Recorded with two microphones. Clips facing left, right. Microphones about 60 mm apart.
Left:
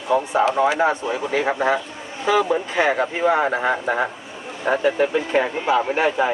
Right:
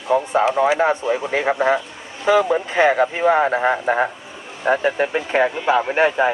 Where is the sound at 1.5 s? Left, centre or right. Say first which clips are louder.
Right 4 dB; centre.